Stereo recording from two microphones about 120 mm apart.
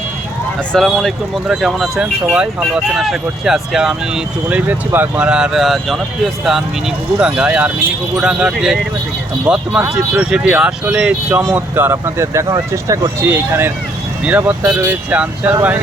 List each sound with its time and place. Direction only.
0.7 s speech: centre (ahead or behind)
7.2 s speech: 10° right (ahead or behind)